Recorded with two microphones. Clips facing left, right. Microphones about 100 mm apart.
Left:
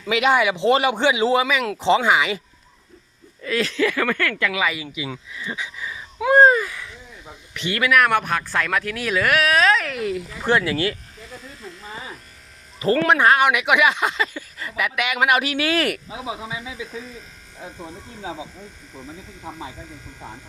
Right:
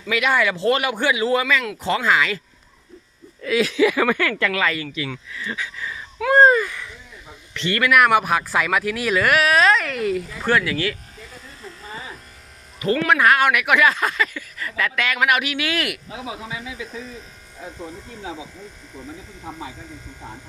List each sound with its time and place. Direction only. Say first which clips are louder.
0.1 s speech: left 2 dB; 20° left (ahead or behind)
3.4 s speech: right 3 dB; 5° right (ahead or behind)
7.9 s speech: right 2 dB; 5° right (ahead or behind)
10.4 s speech: left 1 dB; 25° left (ahead or behind)
12.8 s speech: left 1 dB; 35° left (ahead or behind)
16.0 s speech: left 1 dB; 15° left (ahead or behind)